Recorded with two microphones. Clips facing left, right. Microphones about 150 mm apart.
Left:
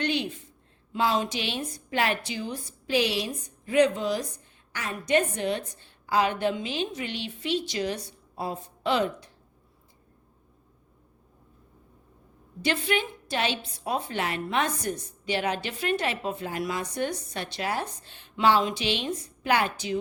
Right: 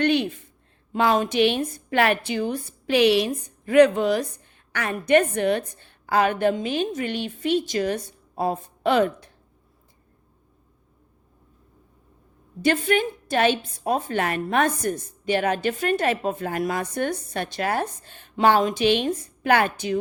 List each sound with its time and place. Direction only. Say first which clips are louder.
0.0 s a sound: right 7 dB; 55° right (ahead or behind)
0.9 s a woman's voice: right 6 dB; 55° right (ahead or behind)
12.6 s a woman's voice: right 6 dB; 45° right (ahead or behind)